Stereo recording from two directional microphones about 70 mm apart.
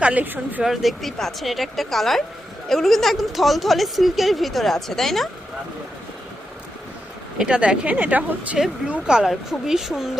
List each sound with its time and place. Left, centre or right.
0.0 s a woman's voice: right
0.6 s a woman's voice: centre
7.3 s speech: centre
9.0 s a woman's voice: centre